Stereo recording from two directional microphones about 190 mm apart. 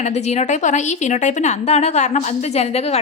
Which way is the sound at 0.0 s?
35° left (ahead or behind).